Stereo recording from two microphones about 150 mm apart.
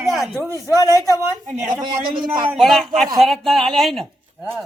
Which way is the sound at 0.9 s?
20° left (ahead or behind).